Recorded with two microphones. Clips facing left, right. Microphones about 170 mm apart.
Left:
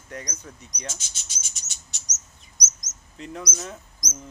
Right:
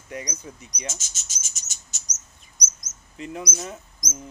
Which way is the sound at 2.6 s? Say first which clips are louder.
Even; 55° right (ahead or behind).